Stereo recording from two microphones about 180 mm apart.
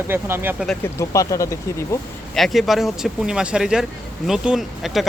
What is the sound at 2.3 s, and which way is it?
Speech, centre (ahead or behind).